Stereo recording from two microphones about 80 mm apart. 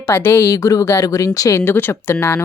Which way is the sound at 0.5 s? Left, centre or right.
Left.